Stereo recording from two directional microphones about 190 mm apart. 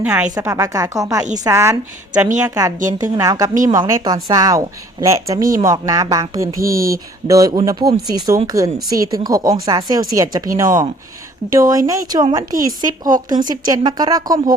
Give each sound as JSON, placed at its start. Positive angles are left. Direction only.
{"t": 0.0, "sound": "a woman's voice", "side_deg": -5}
{"t": 0.3, "sound": "a woman's voice", "side_deg": -15}
{"t": 6.6, "sound": "speech", "side_deg": -50}
{"t": 7.3, "sound": "a woman's voice", "side_deg": -15}